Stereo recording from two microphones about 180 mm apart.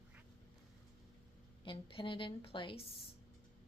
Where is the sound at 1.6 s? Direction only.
30° left (ahead or behind).